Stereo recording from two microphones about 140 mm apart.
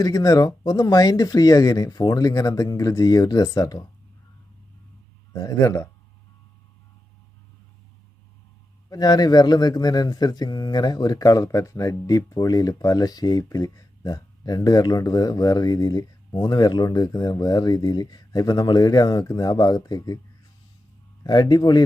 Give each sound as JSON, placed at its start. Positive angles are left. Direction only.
{"t": 0.0, "sound": "speech", "side_deg": 25}
{"t": 5.3, "sound": "speech", "side_deg": 25}
{"t": 8.9, "sound": "speech", "side_deg": 30}
{"t": 21.2, "sound": "speech", "side_deg": 30}